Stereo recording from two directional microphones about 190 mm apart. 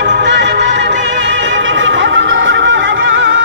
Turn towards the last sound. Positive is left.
turn(degrees=-75)  # may be behind; listen again after turning